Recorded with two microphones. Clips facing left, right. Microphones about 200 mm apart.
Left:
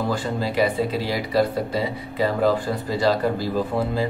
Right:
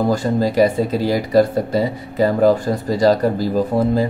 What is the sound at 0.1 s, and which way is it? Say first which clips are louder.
Speech: right 7 dB; 40° right (ahead or behind).